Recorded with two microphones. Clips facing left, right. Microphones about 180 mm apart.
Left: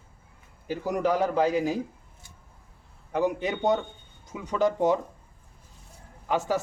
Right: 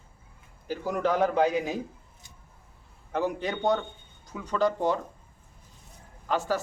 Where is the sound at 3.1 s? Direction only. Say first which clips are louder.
Left 2 dB; 15° left (ahead or behind).